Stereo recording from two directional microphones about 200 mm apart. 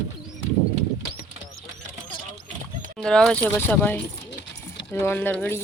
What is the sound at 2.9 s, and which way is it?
Speech, 5° left (ahead or behind).